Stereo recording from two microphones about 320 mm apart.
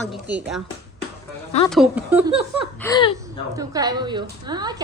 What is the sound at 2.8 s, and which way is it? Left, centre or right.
Speech, centre.